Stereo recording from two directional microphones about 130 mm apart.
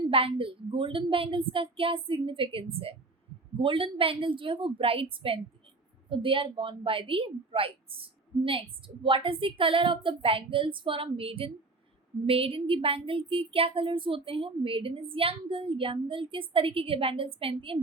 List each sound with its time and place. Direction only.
0.1 s speech: 45° right (ahead or behind)